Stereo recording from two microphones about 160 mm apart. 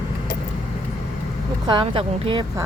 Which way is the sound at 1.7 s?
35° right (ahead or behind).